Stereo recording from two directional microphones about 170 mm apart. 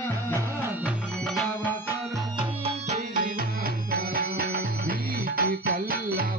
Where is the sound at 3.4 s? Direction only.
60° right (ahead or behind).